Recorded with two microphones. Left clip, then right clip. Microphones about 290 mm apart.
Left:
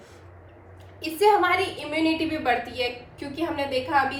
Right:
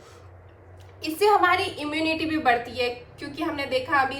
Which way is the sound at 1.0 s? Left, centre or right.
Centre.